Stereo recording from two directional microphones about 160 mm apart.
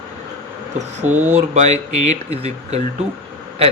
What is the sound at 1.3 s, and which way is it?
Speech, 45° right (ahead or behind).